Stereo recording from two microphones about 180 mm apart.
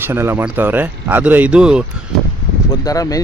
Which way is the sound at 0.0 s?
10° right (ahead or behind).